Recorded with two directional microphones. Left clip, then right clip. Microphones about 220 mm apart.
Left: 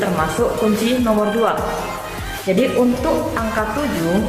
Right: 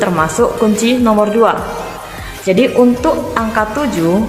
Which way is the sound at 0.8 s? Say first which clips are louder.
Right 5 dB; 45° right (ahead or behind).